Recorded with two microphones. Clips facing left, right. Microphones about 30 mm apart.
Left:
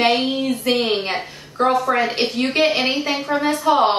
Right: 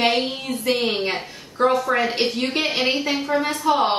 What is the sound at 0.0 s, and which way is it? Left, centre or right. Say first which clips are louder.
A woman's voice: left 3 dB; centre.